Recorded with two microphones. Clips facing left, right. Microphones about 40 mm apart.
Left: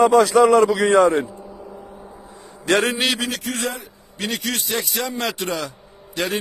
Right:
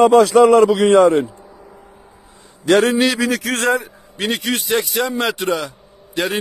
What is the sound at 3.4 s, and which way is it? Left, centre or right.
Speech, right.